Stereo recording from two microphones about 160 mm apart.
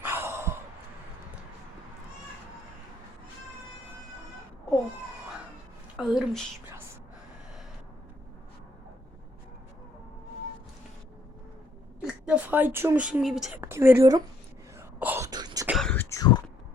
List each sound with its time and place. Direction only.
0.0 s sigh: 15° right (ahead or behind)
6.0 s a woman's voice: centre (ahead or behind)
12.0 s a woman's voice: 5° right (ahead or behind)
13.6 s a woman's voice: 15° right (ahead or behind)
14.8 s wail: 10° right (ahead or behind)
15.3 s wail: 25° right (ahead or behind)
15.6 s whispering: centre (ahead or behind)
16.0 s throat clearing: 20° left (ahead or behind)